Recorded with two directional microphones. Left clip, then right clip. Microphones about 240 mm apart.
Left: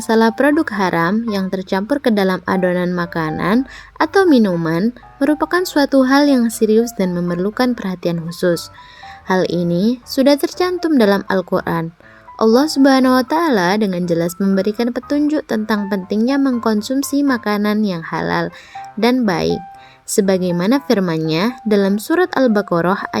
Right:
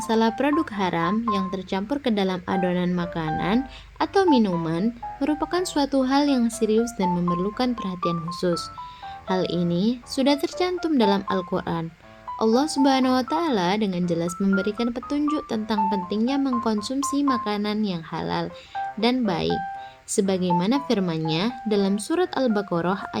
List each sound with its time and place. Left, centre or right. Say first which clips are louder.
0.1 s speech: left 9 dB; left